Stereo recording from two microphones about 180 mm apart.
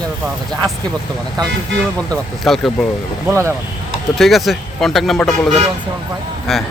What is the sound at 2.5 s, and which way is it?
Speech, centre (ahead or behind).